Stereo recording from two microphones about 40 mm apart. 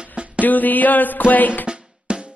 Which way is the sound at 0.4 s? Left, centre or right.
Left.